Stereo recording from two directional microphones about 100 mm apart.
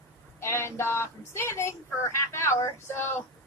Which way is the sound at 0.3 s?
25° left (ahead or behind).